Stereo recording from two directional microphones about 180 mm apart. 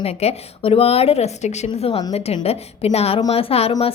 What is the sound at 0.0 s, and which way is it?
A woman's voice, 35° left (ahead or behind).